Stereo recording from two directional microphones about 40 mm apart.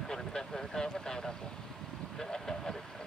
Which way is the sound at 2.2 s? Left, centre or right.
Centre.